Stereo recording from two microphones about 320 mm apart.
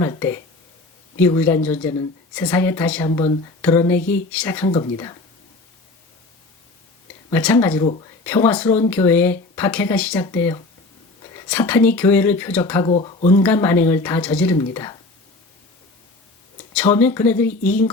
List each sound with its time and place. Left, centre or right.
0.0 s a woman's voice: centre
3.1 s a woman's voice: centre
7.3 s a woman's voice: centre
12.9 s a woman's voice: centre
13.4 s a woman's voice: centre
16.7 s a woman's voice: centre